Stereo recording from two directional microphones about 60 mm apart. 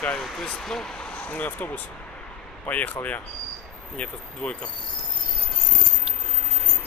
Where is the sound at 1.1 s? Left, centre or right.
Left.